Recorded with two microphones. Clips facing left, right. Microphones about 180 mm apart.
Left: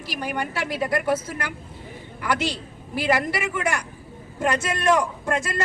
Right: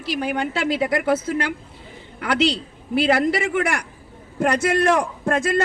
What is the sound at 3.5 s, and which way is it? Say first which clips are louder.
A man's voice: right 4 dB; 65° right (ahead or behind).